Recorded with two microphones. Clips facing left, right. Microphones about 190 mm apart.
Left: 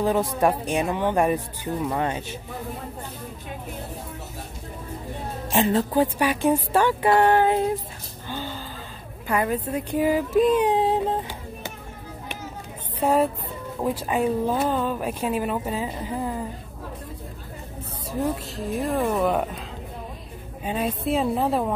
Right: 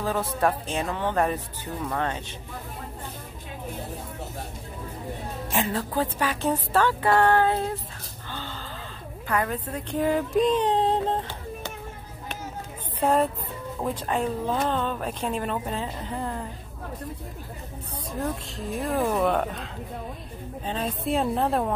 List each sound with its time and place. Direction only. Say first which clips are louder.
0.0 s speech: left 4 dB; 15° left (ahead or behind)
5.5 s speech: left 6 dB; 25° left (ahead or behind)
8.3 s a sound: left 5 dB; 10° left (ahead or behind)
9.3 s speech: left 4 dB; 10° left (ahead or behind)
13.0 s speech: left 2 dB; 5° left (ahead or behind)
18.2 s speech: left 4 dB; centre (ahead or behind)
20.6 s speech: left 3 dB; 10° left (ahead or behind)